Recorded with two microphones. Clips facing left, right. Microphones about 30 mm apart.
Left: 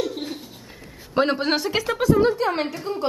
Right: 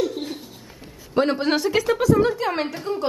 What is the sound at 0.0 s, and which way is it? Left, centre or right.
Bird, centre.